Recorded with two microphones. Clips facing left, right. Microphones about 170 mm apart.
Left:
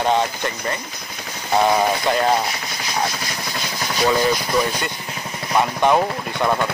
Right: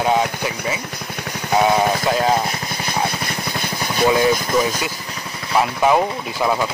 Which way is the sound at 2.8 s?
55° right (ahead or behind).